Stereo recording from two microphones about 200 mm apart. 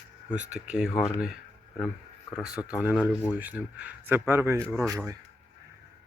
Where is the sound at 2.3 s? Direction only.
5° right (ahead or behind).